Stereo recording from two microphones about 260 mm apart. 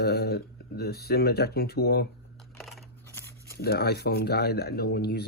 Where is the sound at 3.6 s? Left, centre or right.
Left.